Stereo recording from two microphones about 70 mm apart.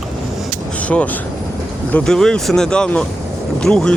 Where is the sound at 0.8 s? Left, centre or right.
Left.